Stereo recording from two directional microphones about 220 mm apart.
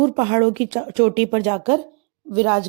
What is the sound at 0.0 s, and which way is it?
A woman's voice, 30° right (ahead or behind).